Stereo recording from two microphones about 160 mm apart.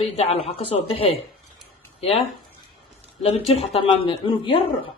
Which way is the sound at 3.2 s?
40° left (ahead or behind).